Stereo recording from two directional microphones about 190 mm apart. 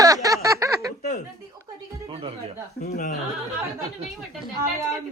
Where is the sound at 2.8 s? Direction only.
50° left (ahead or behind).